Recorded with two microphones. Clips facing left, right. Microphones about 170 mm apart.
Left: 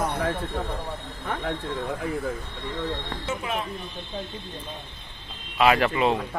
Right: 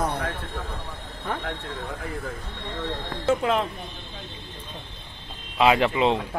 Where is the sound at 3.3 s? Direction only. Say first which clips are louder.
Right 8 dB; 90° right.